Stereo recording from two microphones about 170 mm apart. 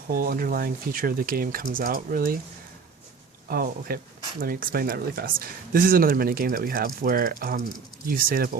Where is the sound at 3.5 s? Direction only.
60° right (ahead or behind).